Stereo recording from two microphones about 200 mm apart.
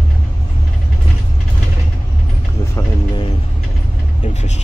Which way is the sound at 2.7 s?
25° left (ahead or behind).